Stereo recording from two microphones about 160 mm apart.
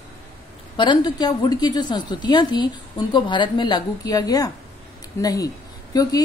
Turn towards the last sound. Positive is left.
turn(degrees=25)  # may be behind; listen again after turning